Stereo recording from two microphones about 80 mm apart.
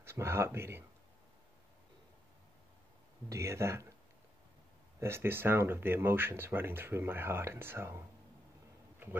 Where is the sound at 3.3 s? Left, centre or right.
Right.